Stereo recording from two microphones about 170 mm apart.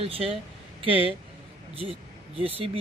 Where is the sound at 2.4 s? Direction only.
35° right (ahead or behind).